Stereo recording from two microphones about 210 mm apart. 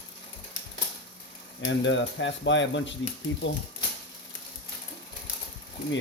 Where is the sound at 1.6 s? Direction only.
60° left (ahead or behind).